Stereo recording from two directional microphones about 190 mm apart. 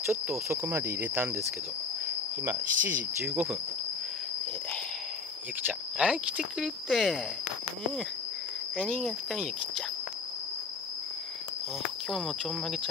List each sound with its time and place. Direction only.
0.0 s cricket: 10° right (ahead or behind)
2.7 s speech: 45° right (ahead or behind)
3.3 s cricket: 5° right (ahead or behind)
5.7 s speech: 5° right (ahead or behind)
9.0 s speech: centre (ahead or behind)
12.1 s speech: centre (ahead or behind)